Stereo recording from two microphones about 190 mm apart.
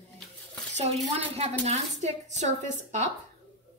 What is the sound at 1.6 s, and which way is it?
Speech, 35° right (ahead or behind).